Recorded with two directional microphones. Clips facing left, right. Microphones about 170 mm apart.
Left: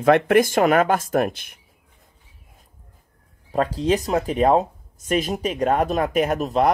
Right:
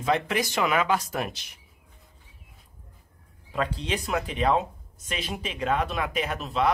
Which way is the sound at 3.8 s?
40° left (ahead or behind).